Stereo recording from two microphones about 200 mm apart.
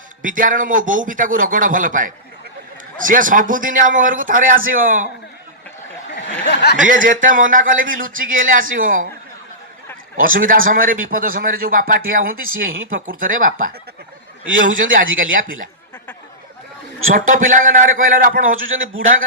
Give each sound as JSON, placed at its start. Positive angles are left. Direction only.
{"t": 0.2, "sound": "a man's voice", "side_deg": -40}
{"t": 6.4, "sound": "speech", "side_deg": 55}
{"t": 6.7, "sound": "a man's voice", "side_deg": -40}
{"t": 10.2, "sound": "a man's voice", "side_deg": -45}
{"t": 12.5, "sound": "a man's voice", "side_deg": -80}
{"t": 12.9, "sound": "a man's voice", "side_deg": -45}
{"t": 15.2, "sound": "a man's voice", "side_deg": -45}
{"t": 17.2, "sound": "a man's voice", "side_deg": -45}
{"t": 18.5, "sound": "a man's voice", "side_deg": -80}